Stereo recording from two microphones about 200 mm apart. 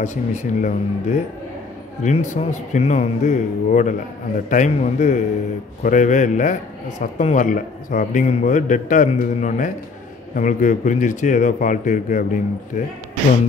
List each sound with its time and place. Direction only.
0.0 s a man's voice: 35° left (ahead or behind)